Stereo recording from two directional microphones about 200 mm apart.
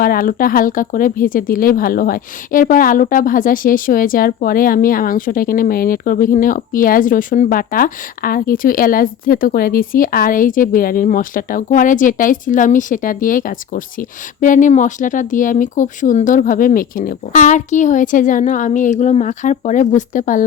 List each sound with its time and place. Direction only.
0.0 s speech: 45° left (ahead or behind)